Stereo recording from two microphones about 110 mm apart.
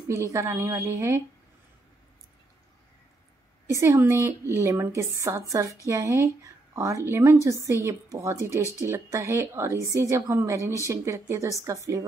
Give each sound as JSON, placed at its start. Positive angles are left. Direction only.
{"t": 0.1, "sound": "a woman's voice", "side_deg": -25}
{"t": 3.6, "sound": "a woman's voice", "side_deg": -25}